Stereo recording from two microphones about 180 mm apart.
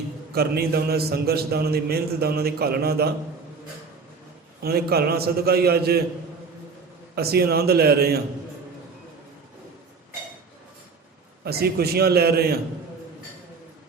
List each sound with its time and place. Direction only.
0.3 s a man's voice: 60° right (ahead or behind)
4.6 s a man's voice: 60° right (ahead or behind)
7.2 s a man's voice: 60° right (ahead or behind)
11.4 s a man's voice: 60° right (ahead or behind)